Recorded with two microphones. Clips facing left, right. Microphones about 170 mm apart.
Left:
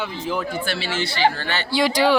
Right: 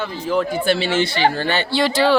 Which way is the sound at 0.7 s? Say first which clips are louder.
Right 7 dB; 20° right (ahead or behind).